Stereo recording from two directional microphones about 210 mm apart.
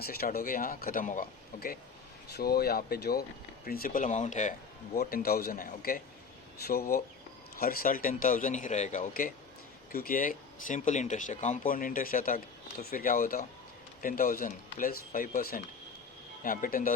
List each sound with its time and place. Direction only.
0.0 s speech: 45° left (ahead or behind)
4.9 s speech: 45° left (ahead or behind)